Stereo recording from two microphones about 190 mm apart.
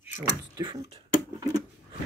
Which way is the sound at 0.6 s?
20° right (ahead or behind).